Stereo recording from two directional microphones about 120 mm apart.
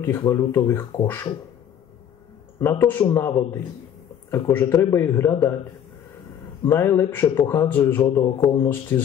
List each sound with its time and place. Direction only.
0.0 s a man's voice: 20° left (ahead or behind)
2.6 s a man's voice: 20° left (ahead or behind)
6.6 s a man's voice: 20° left (ahead or behind)